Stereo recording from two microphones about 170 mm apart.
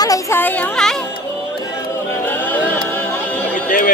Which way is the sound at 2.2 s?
10° left (ahead or behind).